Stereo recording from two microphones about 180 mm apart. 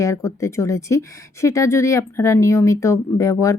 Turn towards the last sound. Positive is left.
turn(degrees=20)  # may be behind; listen again after turning